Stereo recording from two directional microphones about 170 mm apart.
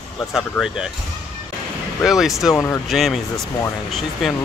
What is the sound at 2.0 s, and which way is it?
Speech, centre (ahead or behind).